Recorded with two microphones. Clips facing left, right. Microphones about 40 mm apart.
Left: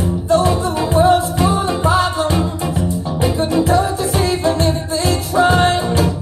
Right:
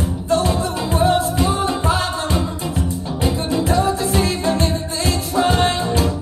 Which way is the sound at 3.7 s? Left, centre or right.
Left.